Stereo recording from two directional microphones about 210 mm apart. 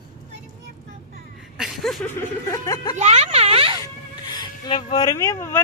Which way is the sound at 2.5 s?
15° left (ahead or behind).